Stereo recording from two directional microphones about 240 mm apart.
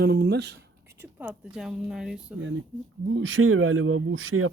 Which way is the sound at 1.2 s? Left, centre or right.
Centre.